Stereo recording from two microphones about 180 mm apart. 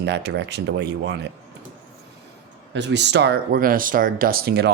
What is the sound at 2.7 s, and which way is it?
Speech, 75° right (ahead or behind).